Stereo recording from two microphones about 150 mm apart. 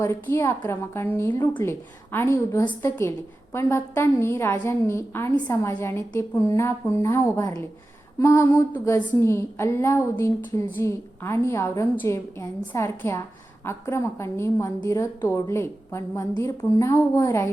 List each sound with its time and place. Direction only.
0.0 s a woman's voice: 15° left (ahead or behind)